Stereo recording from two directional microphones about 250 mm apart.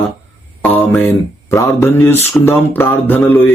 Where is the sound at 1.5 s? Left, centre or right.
Centre.